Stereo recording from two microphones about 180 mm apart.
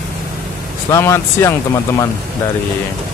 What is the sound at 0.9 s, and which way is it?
Speech, 15° left (ahead or behind).